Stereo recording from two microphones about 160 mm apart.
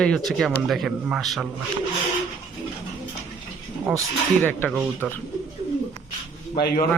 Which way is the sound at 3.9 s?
Centre (ahead or behind).